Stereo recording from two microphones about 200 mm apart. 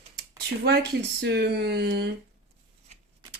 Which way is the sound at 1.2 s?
55° right (ahead or behind).